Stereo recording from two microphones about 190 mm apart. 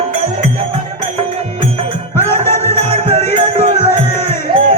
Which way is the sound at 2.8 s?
35° right (ahead or behind).